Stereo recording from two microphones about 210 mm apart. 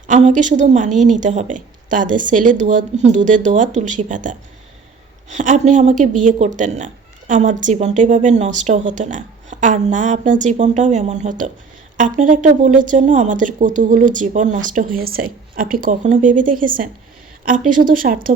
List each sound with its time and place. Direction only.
0.1 s speech: 35° right (ahead or behind)